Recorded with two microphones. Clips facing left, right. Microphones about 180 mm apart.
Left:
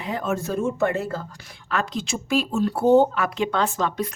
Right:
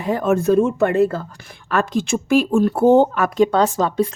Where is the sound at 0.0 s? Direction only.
50° right (ahead or behind).